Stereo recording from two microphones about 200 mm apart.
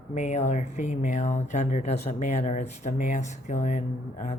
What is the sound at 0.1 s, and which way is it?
Speech, 35° left (ahead or behind).